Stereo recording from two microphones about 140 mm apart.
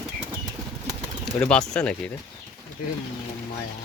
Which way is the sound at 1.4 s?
5° left (ahead or behind).